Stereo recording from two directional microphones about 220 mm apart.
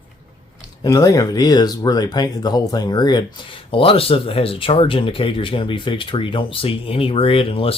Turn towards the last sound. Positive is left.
turn(degrees=25)  # may be behind; listen again after turning